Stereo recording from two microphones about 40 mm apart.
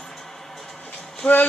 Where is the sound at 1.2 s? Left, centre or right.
Left.